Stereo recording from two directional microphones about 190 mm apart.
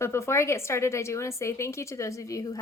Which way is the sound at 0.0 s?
15° left (ahead or behind).